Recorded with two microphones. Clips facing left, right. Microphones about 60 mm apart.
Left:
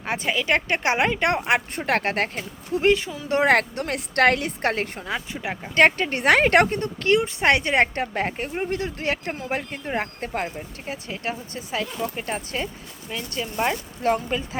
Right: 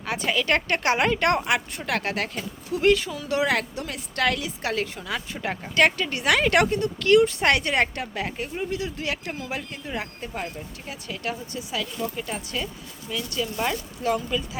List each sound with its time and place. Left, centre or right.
0.0 s a sound: left
0.3 s a woman's voice: centre
1.5 s speech: left
3.2 s a woman's voice: left
5.1 s speech: centre
5.7 s speech: left
10.4 s speech: left